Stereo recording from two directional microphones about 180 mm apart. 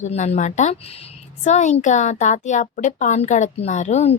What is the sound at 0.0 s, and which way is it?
A woman's voice, 40° left (ahead or behind).